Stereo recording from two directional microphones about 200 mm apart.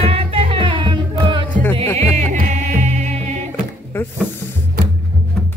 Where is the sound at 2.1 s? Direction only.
40° right (ahead or behind).